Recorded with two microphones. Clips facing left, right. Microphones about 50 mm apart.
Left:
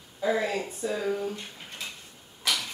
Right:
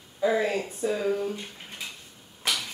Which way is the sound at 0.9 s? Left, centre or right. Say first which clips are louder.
Right 1 dB; centre.